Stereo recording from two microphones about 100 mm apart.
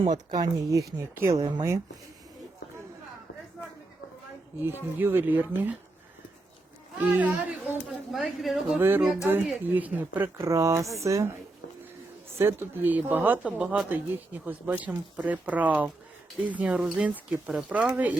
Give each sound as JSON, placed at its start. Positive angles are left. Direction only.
{"t": 0.0, "sound": "speech", "side_deg": -45}
{"t": 0.9, "sound": "speech", "side_deg": -25}
{"t": 1.4, "sound": "speech", "side_deg": -45}
{"t": 4.9, "sound": "speech", "side_deg": -20}
{"t": 7.0, "sound": "speech", "side_deg": -15}
{"t": 7.9, "sound": "speech", "side_deg": 0}
{"t": 8.8, "sound": "speech", "side_deg": -20}
{"t": 10.4, "sound": "speech", "side_deg": -30}
{"t": 12.4, "sound": "speech", "side_deg": -25}
{"t": 13.4, "sound": "speech", "side_deg": -10}